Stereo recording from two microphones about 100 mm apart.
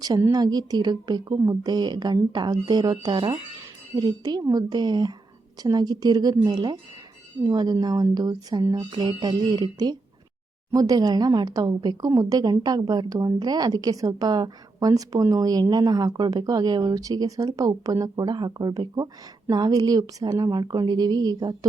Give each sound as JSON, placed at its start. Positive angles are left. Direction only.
{"t": 0.3, "sound": "speech", "side_deg": -40}
{"t": 8.7, "sound": "speech", "side_deg": -50}